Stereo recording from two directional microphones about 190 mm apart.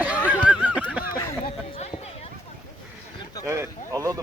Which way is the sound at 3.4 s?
15° right (ahead or behind).